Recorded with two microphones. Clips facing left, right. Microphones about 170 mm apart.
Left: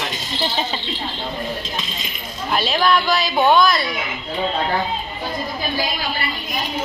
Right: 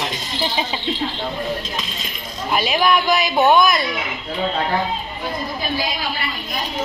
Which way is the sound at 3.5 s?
20° right (ahead or behind).